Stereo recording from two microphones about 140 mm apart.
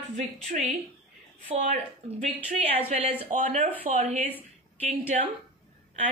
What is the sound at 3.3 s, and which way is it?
Speech, 60° right (ahead or behind).